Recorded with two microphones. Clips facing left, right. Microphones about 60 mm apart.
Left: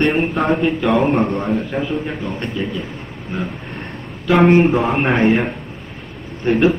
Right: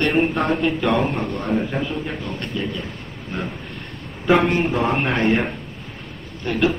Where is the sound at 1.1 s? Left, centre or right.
Left.